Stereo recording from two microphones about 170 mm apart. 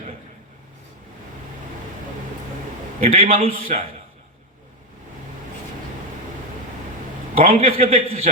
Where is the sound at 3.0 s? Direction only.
50° right (ahead or behind).